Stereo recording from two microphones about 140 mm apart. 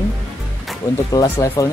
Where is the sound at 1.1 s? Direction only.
25° left (ahead or behind).